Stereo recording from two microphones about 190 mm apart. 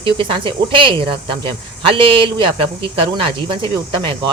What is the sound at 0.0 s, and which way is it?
Speech, 25° right (ahead or behind).